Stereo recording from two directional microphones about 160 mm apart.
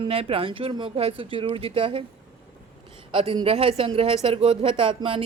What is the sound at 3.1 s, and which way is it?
Speech, 35° right (ahead or behind).